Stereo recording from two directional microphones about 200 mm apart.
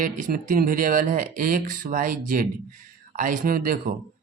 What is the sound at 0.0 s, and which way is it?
Speech, 40° right (ahead or behind).